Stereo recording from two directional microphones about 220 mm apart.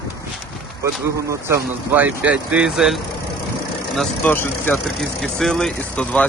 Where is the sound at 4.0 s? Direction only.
10° left (ahead or behind).